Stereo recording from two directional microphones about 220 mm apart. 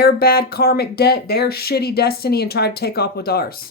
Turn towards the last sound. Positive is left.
turn(degrees=45)  # may be behind; listen again after turning